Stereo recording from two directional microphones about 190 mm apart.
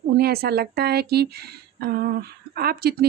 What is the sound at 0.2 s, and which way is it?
Speech, 55° right (ahead or behind).